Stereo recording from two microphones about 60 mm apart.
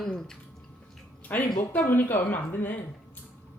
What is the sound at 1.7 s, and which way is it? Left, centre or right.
Speech, left.